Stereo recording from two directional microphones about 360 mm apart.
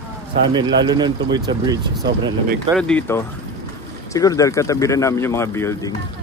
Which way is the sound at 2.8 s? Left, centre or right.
Centre.